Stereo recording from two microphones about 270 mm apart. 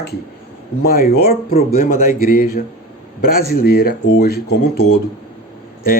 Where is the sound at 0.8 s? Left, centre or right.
Left.